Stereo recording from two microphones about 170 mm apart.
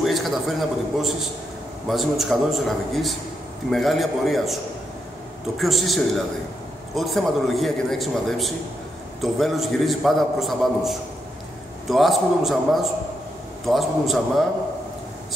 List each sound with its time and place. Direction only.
0.0 s a man's voice: centre (ahead or behind)
5.6 s a man's voice: centre (ahead or behind)